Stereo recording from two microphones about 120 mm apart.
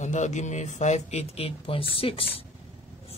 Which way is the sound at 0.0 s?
80° left.